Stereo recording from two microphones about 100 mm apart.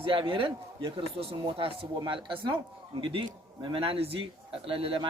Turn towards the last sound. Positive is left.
turn(degrees=-65)  # may be behind; listen again after turning